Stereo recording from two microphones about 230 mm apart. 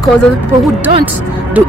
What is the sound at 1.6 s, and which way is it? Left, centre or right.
Speech, centre.